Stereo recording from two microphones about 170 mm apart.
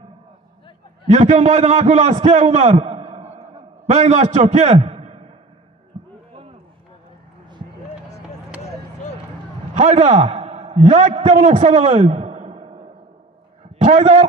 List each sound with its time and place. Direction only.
1.1 s a man's voice: 45° right (ahead or behind)
5.9 s a sound: 45° right (ahead or behind)
9.8 s a man's voice: 40° right (ahead or behind)
13.8 s a man's voice: 40° right (ahead or behind)